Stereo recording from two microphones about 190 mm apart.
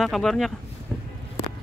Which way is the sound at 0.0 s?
Centre (ahead or behind).